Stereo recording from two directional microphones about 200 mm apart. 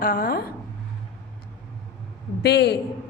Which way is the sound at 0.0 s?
45° left (ahead or behind).